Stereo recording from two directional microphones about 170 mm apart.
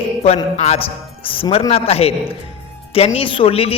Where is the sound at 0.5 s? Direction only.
40° left (ahead or behind).